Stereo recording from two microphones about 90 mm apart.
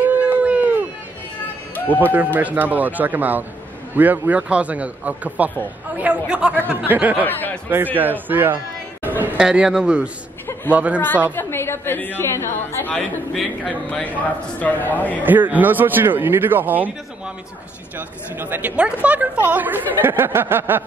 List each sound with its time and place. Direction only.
0.0 s a sound: 20° right (ahead or behind)
2.1 s a woman's voice: 20° right (ahead or behind)
7.2 s a woman's voice: 20° left (ahead or behind)
7.7 s a woman's voice: 20° right (ahead or behind)
9.0 s chatter: 20° right (ahead or behind)
9.4 s a man's voice: 10° right (ahead or behind)
11.3 s a woman's voice: 25° left (ahead or behind)
12.9 s a man's voice: 5° left (ahead or behind)
15.2 s a woman's voice: 20° right (ahead or behind)
17.9 s a woman's voice: 20° right (ahead or behind)